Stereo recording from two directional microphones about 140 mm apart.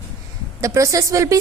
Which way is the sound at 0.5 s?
25° right (ahead or behind).